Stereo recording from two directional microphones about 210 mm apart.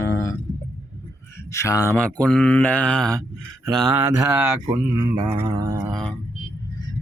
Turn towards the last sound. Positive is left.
turn(degrees=5)  # may be behind; listen again after turning